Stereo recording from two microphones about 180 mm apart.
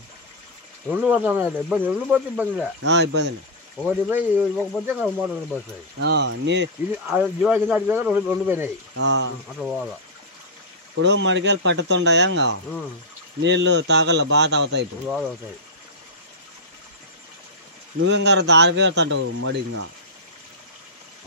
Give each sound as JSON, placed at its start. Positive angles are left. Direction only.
{"t": 0.8, "sound": "speech", "side_deg": -10}
{"t": 2.9, "sound": "speech", "side_deg": -75}
{"t": 3.8, "sound": "speech", "side_deg": -10}
{"t": 5.9, "sound": "speech", "side_deg": -75}
{"t": 6.9, "sound": "speech", "side_deg": -10}
{"t": 9.0, "sound": "speech", "side_deg": -80}
{"t": 9.6, "sound": "speech", "side_deg": 0}
{"t": 11.0, "sound": "speech", "side_deg": -90}
{"t": 13.4, "sound": "speech", "side_deg": -85}
{"t": 18.0, "sound": "speech", "side_deg": -75}